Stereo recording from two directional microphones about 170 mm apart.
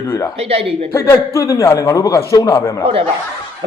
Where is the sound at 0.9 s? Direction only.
20° left (ahead or behind).